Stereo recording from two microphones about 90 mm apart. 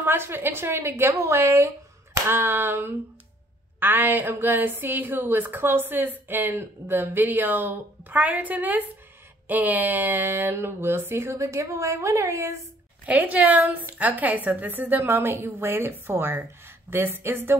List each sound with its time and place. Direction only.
0.0 s a woman's voice: 25° right (ahead or behind)
13.0 s a woman's voice: 15° right (ahead or behind)